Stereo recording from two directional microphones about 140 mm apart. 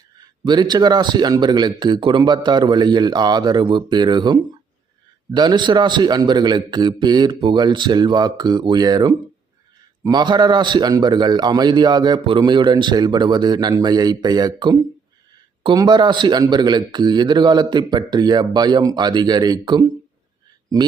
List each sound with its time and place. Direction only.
0.4 s a man's voice: 30° right (ahead or behind)